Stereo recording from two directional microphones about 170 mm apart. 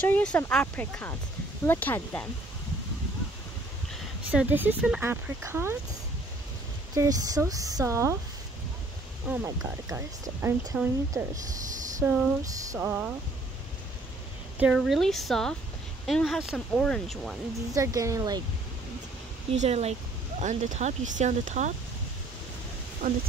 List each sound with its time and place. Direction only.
0.0 s speech: 10° left (ahead or behind)
4.3 s speech: 10° right (ahead or behind)
6.9 s speech: 20° right (ahead or behind)
9.3 s speech: 10° right (ahead or behind)
14.6 s speech: centre (ahead or behind)
17.7 s speech: 20° right (ahead or behind)
19.5 s speech: 40° right (ahead or behind)
23.0 s speech: 55° right (ahead or behind)